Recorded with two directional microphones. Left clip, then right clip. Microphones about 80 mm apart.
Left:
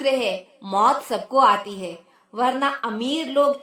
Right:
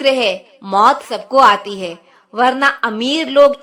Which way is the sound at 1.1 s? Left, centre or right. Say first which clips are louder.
Right 7 dB; right.